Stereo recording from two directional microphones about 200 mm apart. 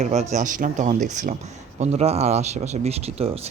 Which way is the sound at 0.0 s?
35° right (ahead or behind).